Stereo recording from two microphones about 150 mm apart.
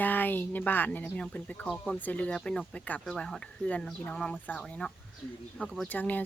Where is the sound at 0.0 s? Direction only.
10° left (ahead or behind).